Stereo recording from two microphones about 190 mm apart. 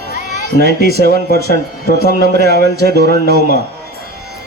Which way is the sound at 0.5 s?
60° right (ahead or behind).